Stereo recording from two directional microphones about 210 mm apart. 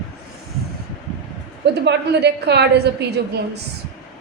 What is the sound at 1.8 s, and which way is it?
A woman's voice, 50° right (ahead or behind).